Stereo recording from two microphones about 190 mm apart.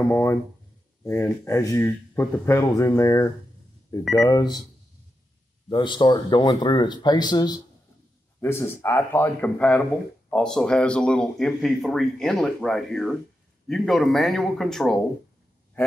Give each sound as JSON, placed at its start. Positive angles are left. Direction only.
{"t": 0.0, "sound": "speech", "side_deg": 15}
{"t": 5.7, "sound": "speech", "side_deg": 25}